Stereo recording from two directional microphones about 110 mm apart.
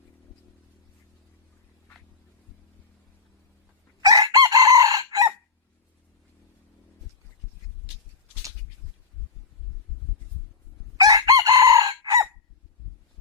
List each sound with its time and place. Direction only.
4.0 s chicken: 35° right (ahead or behind)
10.9 s chicken: 35° right (ahead or behind)